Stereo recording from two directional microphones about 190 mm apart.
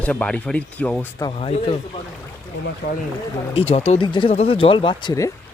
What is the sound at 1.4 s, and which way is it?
Speech, 30° left (ahead or behind).